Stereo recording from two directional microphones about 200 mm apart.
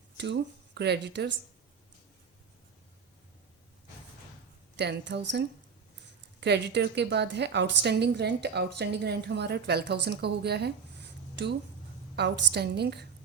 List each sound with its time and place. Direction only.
0.2 s speech: 60° right (ahead or behind)
4.8 s a woman's voice: 60° right (ahead or behind)
6.4 s a woman's voice: 60° right (ahead or behind)
12.1 s a woman's voice: 60° right (ahead or behind)